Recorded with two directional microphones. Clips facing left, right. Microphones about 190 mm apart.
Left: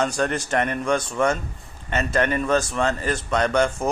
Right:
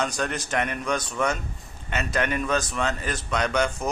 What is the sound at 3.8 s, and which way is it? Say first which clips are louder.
Speech: left 4 dB; 30° left (ahead or behind).